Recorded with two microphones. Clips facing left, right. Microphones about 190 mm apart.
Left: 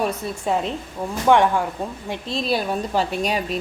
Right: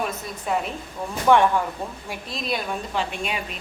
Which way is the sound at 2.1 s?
30° left (ahead or behind).